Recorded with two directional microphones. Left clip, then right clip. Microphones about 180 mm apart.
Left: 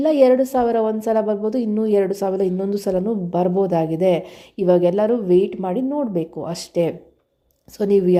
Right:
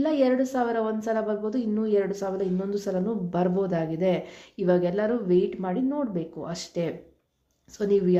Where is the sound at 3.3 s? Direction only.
20° left (ahead or behind).